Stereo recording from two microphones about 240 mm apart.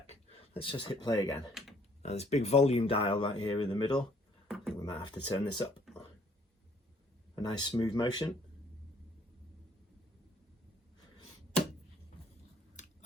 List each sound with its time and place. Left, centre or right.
0.1 s speech: left
2.0 s speech: left
4.4 s beatboxing: centre
4.8 s speech: centre
7.3 s speech: centre
12.8 s biting: left